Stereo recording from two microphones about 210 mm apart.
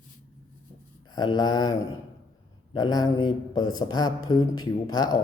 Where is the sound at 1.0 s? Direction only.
20° left (ahead or behind).